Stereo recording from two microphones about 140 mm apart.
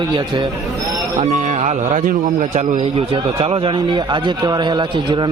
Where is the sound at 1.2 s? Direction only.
55° right (ahead or behind).